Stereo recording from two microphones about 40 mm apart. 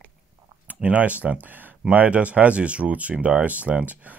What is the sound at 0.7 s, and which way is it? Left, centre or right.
Speech, right.